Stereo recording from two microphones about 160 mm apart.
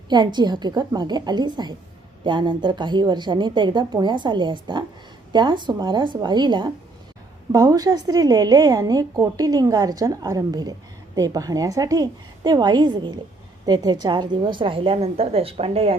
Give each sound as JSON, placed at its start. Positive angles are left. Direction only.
{"t": 0.1, "sound": "a woman's voice", "side_deg": -30}